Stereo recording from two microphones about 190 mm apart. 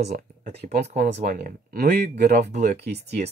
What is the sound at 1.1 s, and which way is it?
Speech, 40° right (ahead or behind).